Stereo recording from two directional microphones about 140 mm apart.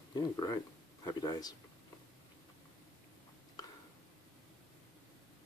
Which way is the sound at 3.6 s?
25° left (ahead or behind).